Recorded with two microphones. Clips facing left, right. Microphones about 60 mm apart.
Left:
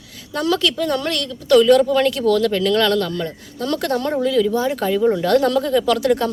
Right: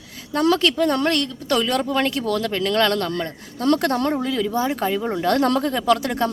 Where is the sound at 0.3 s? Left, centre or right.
Right.